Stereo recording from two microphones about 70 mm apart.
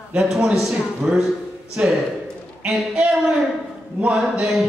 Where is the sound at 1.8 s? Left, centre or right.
Centre.